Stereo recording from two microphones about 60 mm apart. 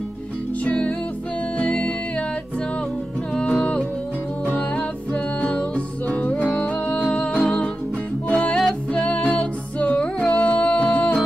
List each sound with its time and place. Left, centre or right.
0.7 s music: left
3.3 s music: centre
5.1 s music: left
7.3 s music: centre